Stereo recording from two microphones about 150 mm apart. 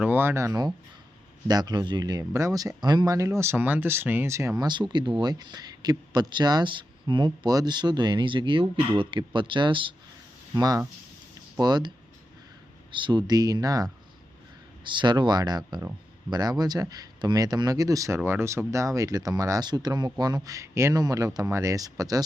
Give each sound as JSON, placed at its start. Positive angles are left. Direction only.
{"t": 0.0, "sound": "speech", "side_deg": -15}
{"t": 10.5, "sound": "speech", "side_deg": -25}